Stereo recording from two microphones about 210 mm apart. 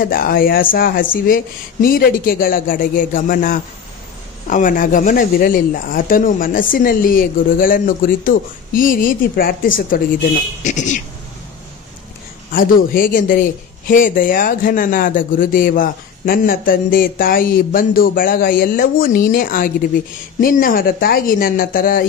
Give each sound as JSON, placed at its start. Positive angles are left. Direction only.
{"t": 0.0, "sound": "a man's voice", "side_deg": 45}
{"t": 12.5, "sound": "a man's voice", "side_deg": 40}